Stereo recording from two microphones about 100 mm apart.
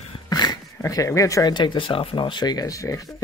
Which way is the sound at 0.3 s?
40° left (ahead or behind).